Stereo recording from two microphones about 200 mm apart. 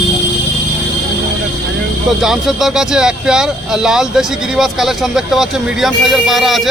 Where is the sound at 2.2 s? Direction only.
Centre (ahead or behind).